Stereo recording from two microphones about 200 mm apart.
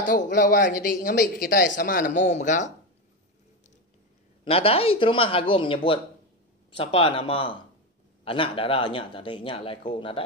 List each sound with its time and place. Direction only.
0.0 s speech: 40° left (ahead or behind)
4.5 s speech: 30° left (ahead or behind)